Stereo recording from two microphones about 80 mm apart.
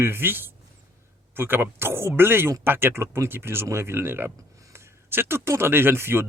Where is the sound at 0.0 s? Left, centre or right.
Right.